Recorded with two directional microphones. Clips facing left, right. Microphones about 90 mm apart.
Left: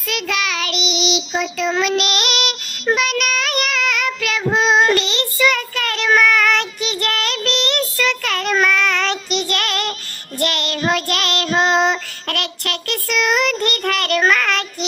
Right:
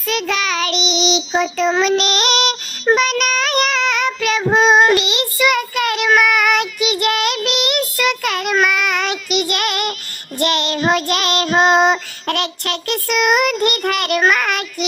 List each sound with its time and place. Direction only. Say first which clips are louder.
0.1 s child singing: right 3 dB; 35° right (ahead or behind); by 14.8 s 15° right (ahead or behind)